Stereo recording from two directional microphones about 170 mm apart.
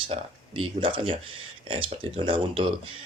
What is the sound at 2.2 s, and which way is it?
Speech, 30° right (ahead or behind).